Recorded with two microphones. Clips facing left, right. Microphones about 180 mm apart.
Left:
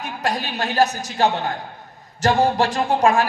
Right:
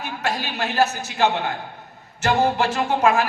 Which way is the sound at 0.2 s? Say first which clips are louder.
Left 2 dB; 35° left (ahead or behind).